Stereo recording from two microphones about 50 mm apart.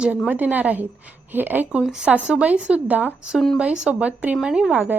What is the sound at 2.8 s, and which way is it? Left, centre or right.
Speech, right.